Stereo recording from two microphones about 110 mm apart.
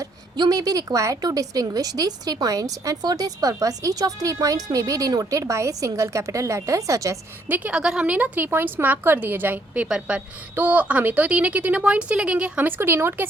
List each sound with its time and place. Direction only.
0.0 s a woman's voice: 35° right (ahead or behind)
7.4 s a woman's voice: 15° right (ahead or behind)